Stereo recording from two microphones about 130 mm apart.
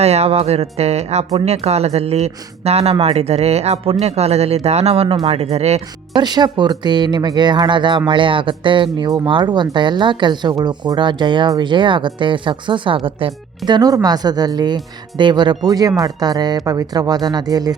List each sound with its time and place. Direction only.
0.0 s speech: 55° right (ahead or behind)
6.1 s speech: 35° right (ahead or behind)
13.7 s speech: 30° right (ahead or behind)